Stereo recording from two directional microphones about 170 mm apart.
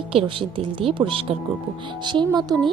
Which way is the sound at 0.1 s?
35° right (ahead or behind).